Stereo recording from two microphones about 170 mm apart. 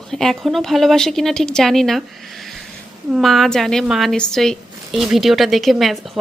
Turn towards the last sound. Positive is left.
turn(degrees=0)  # may be behind; listen again after turning